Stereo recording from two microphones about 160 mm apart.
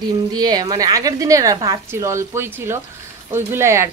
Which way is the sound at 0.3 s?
25° right (ahead or behind).